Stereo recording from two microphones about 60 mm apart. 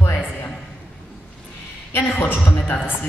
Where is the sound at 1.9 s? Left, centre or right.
Left.